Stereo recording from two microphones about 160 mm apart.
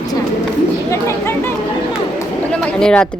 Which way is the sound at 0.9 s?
15° left (ahead or behind).